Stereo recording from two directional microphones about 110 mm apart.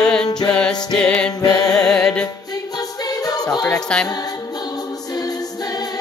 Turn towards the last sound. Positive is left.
turn(degrees=5)  # may be behind; listen again after turning